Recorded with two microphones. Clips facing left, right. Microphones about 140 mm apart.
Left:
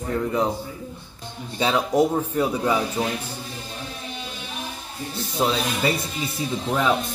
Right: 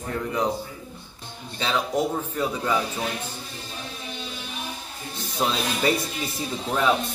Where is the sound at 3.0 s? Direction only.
35° left (ahead or behind).